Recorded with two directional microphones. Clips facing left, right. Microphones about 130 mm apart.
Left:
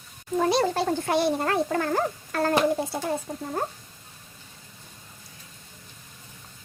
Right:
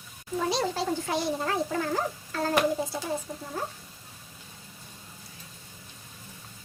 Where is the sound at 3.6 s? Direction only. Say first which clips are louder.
Left 4 dB; 55° left (ahead or behind).